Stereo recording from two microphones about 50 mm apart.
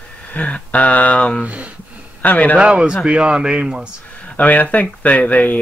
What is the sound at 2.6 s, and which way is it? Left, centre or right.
Speech, centre.